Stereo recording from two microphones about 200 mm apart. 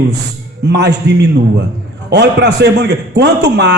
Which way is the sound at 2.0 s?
60° right (ahead or behind).